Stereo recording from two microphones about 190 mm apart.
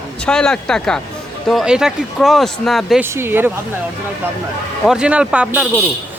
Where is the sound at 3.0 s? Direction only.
10° right (ahead or behind).